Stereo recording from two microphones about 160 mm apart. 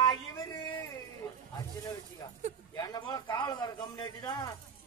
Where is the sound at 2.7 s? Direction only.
25° left (ahead or behind).